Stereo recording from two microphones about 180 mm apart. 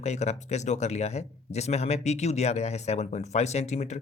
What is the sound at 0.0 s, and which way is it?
Speech, 40° left (ahead or behind).